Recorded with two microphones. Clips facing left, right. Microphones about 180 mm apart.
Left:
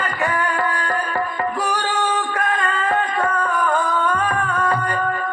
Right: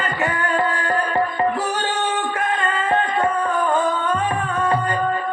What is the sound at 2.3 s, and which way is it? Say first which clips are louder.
Music: even; 20° right (ahead or behind).